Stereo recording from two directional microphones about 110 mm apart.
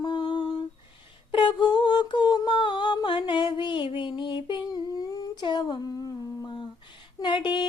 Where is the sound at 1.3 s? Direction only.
50° left (ahead or behind).